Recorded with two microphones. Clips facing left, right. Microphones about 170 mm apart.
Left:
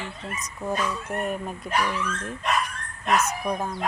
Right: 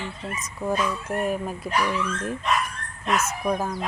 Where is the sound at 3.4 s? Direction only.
5° right (ahead or behind).